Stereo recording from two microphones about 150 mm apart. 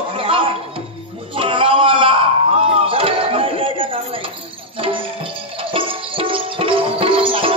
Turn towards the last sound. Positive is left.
turn(degrees=-35)  # may be behind; listen again after turning